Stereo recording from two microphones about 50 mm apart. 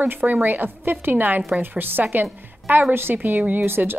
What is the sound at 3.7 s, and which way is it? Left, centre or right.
Speech, right.